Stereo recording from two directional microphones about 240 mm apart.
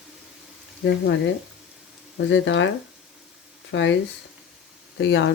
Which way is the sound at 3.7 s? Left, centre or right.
Left.